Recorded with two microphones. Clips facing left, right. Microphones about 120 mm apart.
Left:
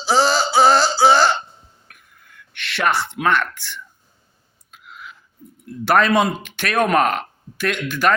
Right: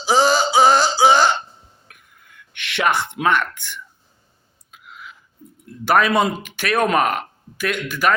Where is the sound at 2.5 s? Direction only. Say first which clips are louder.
Even; 15° right (ahead or behind).